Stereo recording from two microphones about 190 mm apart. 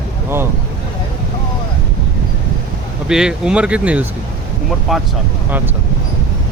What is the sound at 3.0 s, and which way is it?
Speech, 5° right (ahead or behind).